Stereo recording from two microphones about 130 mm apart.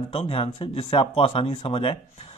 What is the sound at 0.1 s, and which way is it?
Speech, 45° left (ahead or behind).